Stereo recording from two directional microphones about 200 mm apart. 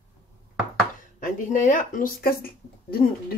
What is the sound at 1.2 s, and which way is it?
Speech, 40° left (ahead or behind).